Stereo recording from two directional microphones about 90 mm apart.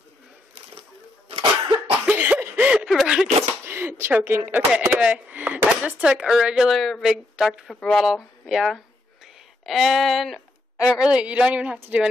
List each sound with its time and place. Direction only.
1.3 s cough: 85° right
2.0 s cough: 15° right (ahead or behind)
2.4 s a sound: 20° right (ahead or behind)
2.8 s a sound: 5° right (ahead or behind)
3.6 s speech: 25° right (ahead or behind); by 10.4 s centre (ahead or behind)
11.0 s speech: 10° right (ahead or behind)